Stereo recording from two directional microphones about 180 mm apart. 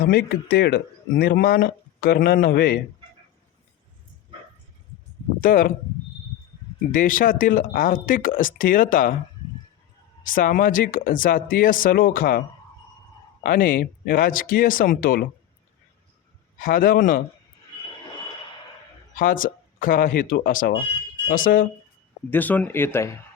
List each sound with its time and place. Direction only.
0.1 s speech: 60° left (ahead or behind)
5.4 s speech: 50° left (ahead or behind)
6.9 s speech: 50° left (ahead or behind)
10.3 s speech: 50° left (ahead or behind)
13.4 s speech: 50° left (ahead or behind)
16.6 s speech: 50° left (ahead or behind)
19.1 s speech: 50° left (ahead or behind)
22.3 s speech: 10° left (ahead or behind)